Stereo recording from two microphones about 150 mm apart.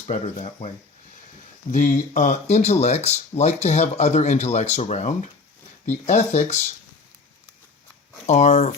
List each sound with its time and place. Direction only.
0.1 s speech: 45° left (ahead or behind)
1.7 s speech: 60° left (ahead or behind)
8.3 s speech: 50° left (ahead or behind)